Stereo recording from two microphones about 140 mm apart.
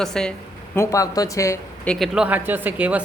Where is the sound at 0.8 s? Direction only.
25° left (ahead or behind).